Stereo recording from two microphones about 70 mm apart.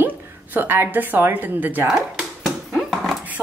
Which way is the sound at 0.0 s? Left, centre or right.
Right.